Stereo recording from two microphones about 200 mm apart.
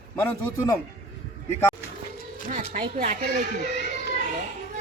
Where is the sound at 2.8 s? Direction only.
40° right (ahead or behind).